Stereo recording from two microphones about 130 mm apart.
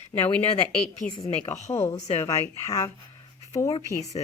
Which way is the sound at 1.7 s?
20° left (ahead or behind).